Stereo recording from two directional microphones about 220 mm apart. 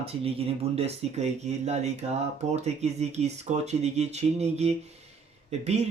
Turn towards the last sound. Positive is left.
turn(degrees=-30)  # may be behind; listen again after turning